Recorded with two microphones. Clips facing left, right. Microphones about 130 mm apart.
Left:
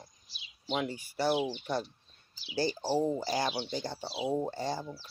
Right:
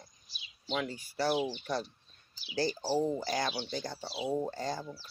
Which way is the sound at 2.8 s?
20° left (ahead or behind).